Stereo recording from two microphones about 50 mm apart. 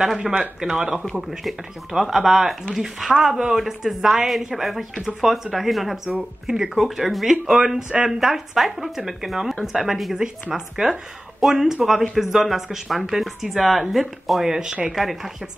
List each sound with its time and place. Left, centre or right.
0.0 s speech: centre
0.7 s speech: centre